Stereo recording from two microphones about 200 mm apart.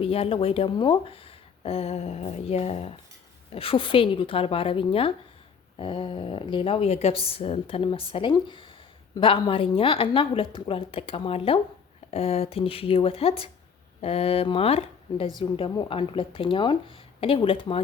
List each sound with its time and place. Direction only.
0.0 s speech: 30° left (ahead or behind)